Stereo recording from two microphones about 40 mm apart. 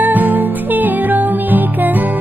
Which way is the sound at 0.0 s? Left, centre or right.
Right.